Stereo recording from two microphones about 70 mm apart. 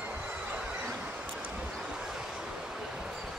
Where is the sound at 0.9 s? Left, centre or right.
Centre.